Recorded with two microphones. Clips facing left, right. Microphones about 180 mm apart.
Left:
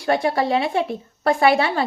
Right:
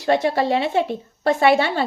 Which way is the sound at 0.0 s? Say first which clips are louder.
Right 1 dB; 25° right (ahead or behind).